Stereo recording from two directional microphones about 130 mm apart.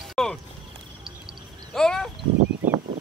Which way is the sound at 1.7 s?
5° left (ahead or behind).